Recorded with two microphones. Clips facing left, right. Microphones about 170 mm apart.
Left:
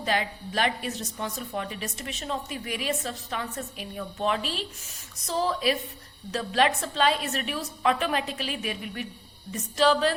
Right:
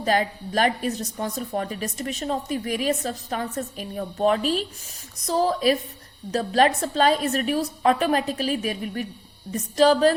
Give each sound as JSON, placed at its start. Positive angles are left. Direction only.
{"t": 0.0, "sound": "a woman's voice", "side_deg": -45}